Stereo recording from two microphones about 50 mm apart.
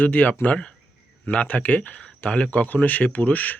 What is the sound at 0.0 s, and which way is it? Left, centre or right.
Speech, left.